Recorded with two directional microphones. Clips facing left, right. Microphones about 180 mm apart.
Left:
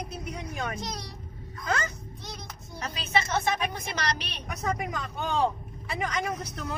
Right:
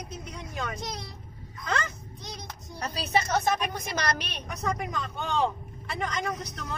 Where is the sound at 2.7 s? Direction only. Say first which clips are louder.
Right 1 dB; 35° right (ahead or behind).